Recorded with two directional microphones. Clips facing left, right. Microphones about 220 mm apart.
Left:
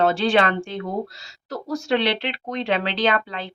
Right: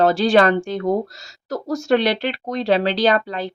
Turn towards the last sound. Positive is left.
turn(degrees=-40)  # may be behind; listen again after turning